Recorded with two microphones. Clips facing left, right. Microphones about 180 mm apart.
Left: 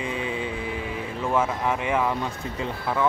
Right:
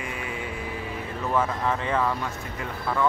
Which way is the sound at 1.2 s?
10° left (ahead or behind).